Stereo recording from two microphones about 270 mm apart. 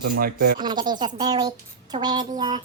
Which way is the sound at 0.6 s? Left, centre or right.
Centre.